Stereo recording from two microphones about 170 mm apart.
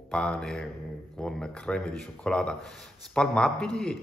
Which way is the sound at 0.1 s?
5° left (ahead or behind).